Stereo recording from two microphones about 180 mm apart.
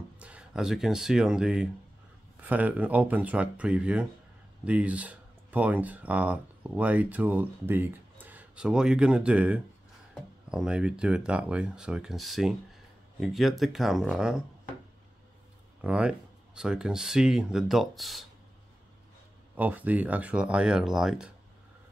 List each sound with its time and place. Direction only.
0.2 s speech: 5° right (ahead or behind)
15.8 s speech: 5° right (ahead or behind)
19.5 s speech: 10° right (ahead or behind)